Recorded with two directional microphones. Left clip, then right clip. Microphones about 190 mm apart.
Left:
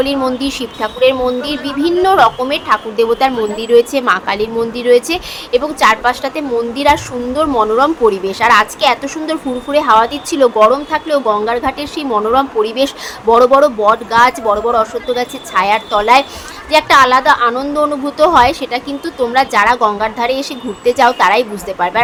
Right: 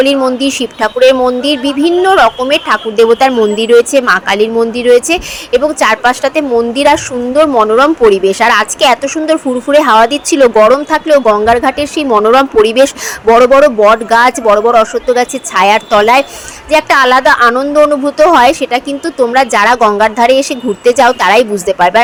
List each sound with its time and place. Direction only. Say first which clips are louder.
0.0 s a woman's voice: right 6 dB; 25° right (ahead or behind)